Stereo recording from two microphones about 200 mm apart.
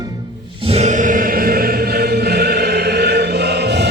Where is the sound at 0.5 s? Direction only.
30° right (ahead or behind).